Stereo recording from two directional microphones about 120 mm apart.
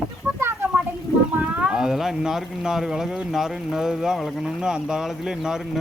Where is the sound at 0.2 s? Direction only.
20° right (ahead or behind).